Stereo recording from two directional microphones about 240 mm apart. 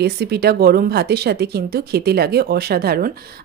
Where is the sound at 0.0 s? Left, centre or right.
Right.